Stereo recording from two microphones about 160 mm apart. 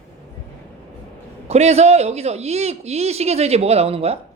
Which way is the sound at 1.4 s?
40° right (ahead or behind).